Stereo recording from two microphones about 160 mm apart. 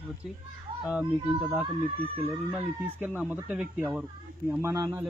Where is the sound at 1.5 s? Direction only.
10° right (ahead or behind).